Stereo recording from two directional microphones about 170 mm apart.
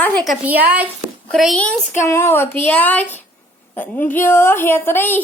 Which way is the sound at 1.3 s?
Centre (ahead or behind).